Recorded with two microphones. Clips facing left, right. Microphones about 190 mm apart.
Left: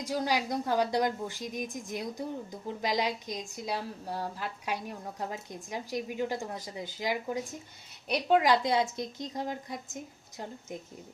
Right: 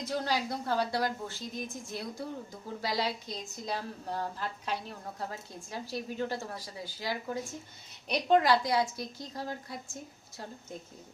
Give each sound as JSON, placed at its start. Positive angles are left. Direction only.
{"t": 0.0, "sound": "a woman's voice", "side_deg": 10}